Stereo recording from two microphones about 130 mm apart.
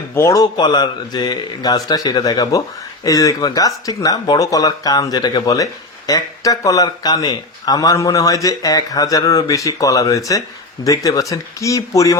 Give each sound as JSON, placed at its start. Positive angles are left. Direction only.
{"t": 0.1, "sound": "a man's voice", "side_deg": 25}
{"t": 0.5, "sound": "a man's voice", "side_deg": 35}